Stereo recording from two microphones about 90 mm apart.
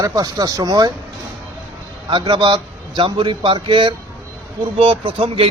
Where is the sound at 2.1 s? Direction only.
65° right (ahead or behind); by 5.5 s 90° right.